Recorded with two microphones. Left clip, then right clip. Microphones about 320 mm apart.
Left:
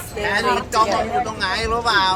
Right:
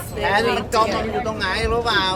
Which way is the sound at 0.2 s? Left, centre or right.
Right.